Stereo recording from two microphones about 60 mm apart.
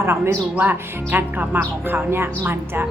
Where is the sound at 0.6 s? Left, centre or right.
Right.